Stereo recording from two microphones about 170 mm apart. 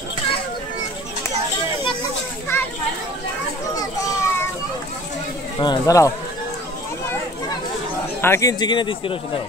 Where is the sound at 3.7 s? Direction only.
20° left (ahead or behind).